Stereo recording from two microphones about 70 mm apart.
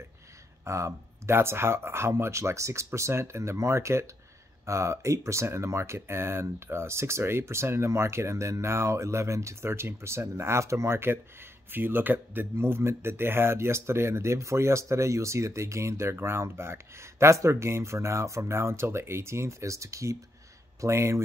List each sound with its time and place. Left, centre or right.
0.7 s speech: right